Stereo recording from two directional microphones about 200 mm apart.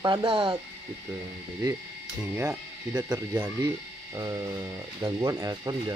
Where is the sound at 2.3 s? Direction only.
10° right (ahead or behind).